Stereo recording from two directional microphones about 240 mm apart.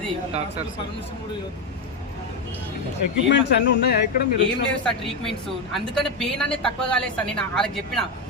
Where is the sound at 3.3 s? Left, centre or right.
Left.